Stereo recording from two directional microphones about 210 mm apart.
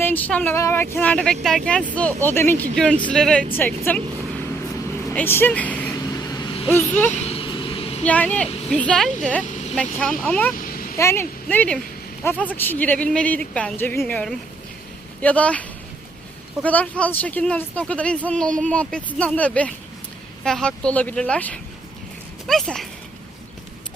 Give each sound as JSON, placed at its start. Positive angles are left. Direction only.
{"t": 0.0, "sound": "speech", "side_deg": 10}
{"t": 5.0, "sound": "vehicle", "side_deg": 10}
{"t": 6.7, "sound": "speech", "side_deg": 10}
{"t": 7.1, "sound": "vehicle", "side_deg": 30}
{"t": 8.0, "sound": "speech", "side_deg": 5}
{"t": 16.6, "sound": "speech", "side_deg": 5}